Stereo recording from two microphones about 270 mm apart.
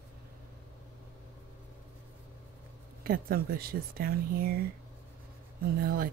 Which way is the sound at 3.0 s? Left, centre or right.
Right.